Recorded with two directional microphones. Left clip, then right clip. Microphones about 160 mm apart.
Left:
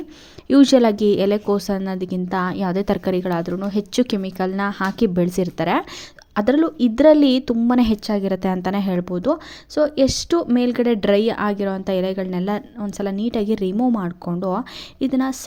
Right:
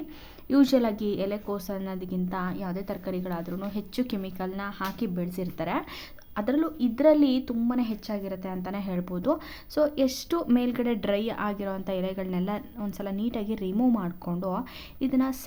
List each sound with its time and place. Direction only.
0.4 s speech: 35° left (ahead or behind)